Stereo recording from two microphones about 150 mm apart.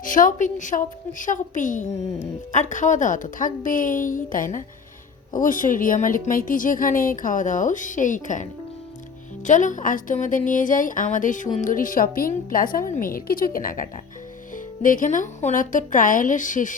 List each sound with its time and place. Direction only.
0.0 s a woman's voice: 65° left (ahead or behind)